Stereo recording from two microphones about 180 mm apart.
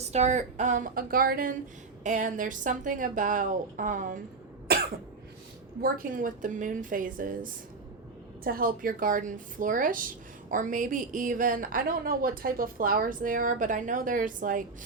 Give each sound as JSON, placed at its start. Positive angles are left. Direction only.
{"t": 0.0, "sound": "a woman's voice", "side_deg": -40}
{"t": 5.8, "sound": "a woman's voice", "side_deg": -50}
{"t": 8.4, "sound": "a woman's voice", "side_deg": -50}